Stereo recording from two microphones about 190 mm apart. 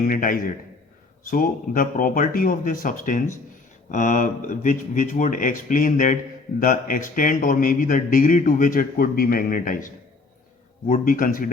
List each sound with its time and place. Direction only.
0.1 s a man's voice: 45° left (ahead or behind)